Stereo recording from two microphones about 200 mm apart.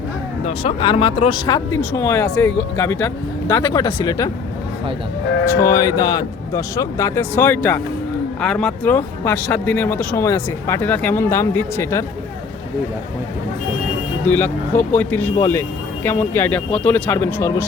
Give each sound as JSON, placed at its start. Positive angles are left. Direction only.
{"t": 0.4, "sound": "speech", "side_deg": 30}
{"t": 5.5, "sound": "speech", "side_deg": 15}
{"t": 14.3, "sound": "speech", "side_deg": 10}